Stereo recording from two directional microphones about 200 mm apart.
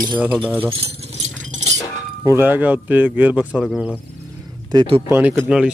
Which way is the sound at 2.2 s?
10° right (ahead or behind).